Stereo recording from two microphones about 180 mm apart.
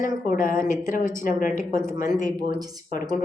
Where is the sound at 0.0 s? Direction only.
50° left (ahead or behind).